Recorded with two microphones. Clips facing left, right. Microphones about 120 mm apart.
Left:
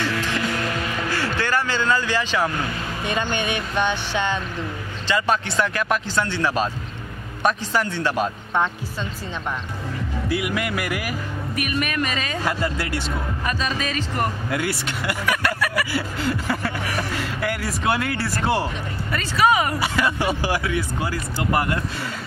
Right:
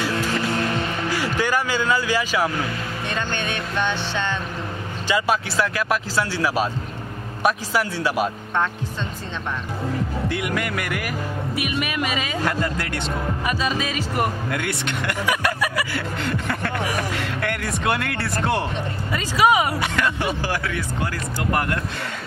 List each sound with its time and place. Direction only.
1.1 s a man's voice: 15° right (ahead or behind)
3.1 s speech: 15° left (ahead or behind)
5.0 s speech: 10° right (ahead or behind)
10.2 s speech: 5° left (ahead or behind)
11.5 s speech: 10° right (ahead or behind)
12.4 s speech: 5° left (ahead or behind)
13.5 s speech: 10° right (ahead or behind)
14.5 s speech: 5° left (ahead or behind)
15.2 s speech: 15° right (ahead or behind)
15.9 s speech: 5° left (ahead or behind)
19.1 s speech: 15° right (ahead or behind)
19.8 s speech: 10° left (ahead or behind)